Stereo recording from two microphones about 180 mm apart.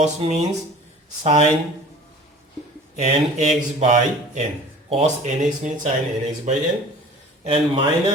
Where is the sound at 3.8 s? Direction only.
40° right (ahead or behind).